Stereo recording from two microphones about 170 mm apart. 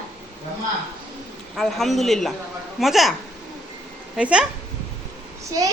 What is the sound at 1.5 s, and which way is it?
Speech, centre (ahead or behind).